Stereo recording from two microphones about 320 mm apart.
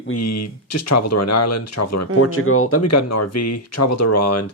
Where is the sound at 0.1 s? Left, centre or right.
Left.